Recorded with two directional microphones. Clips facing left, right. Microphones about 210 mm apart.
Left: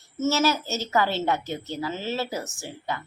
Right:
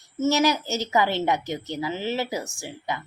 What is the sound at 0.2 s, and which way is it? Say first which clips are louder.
Speech: right 2 dB; 15° right (ahead or behind).